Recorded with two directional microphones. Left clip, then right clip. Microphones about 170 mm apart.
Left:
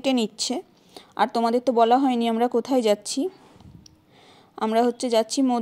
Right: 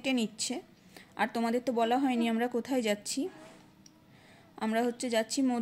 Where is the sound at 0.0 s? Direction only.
40° left (ahead or behind).